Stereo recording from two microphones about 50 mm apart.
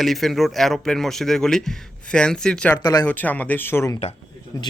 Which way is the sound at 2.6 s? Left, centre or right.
Left.